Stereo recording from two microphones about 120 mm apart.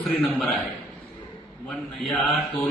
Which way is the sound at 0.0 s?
Centre (ahead or behind).